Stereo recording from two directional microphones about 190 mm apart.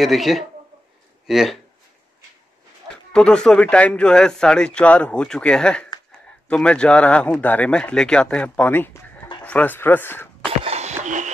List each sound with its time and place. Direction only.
0.0 s speech: centre (ahead or behind)
3.1 s speech: 5° left (ahead or behind)
10.4 s a sound: 30° right (ahead or behind)